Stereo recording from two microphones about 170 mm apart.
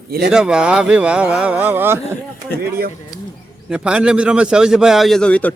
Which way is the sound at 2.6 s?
70° right (ahead or behind).